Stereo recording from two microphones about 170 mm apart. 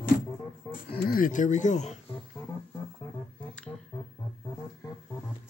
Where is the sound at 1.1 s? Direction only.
55° left (ahead or behind).